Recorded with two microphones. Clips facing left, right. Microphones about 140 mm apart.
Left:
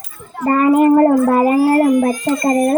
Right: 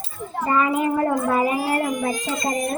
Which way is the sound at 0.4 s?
50° left (ahead or behind).